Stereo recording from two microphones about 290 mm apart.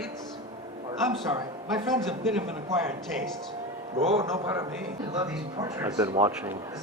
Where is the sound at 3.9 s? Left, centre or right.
Centre.